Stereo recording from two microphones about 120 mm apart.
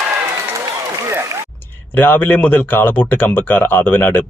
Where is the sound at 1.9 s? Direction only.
15° left (ahead or behind).